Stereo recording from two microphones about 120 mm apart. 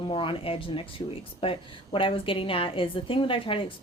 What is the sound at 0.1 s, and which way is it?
Speech, 45° left (ahead or behind).